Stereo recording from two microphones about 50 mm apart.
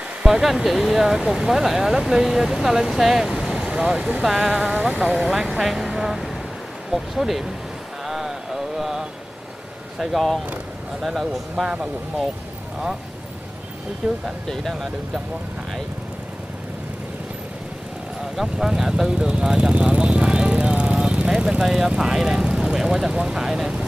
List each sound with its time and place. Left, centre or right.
0.2 s speech: centre
4.2 s speech: centre
8.1 s mantra: centre
9.9 s speech: centre
11.6 s speech: centre
14.0 s speech: centre
18.3 s speech: centre
19.0 s speech: centre
19.7 s vehicle: right
21.3 s speech: centre